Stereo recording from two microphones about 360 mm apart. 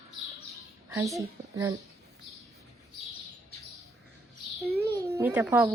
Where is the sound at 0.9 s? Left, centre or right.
Centre.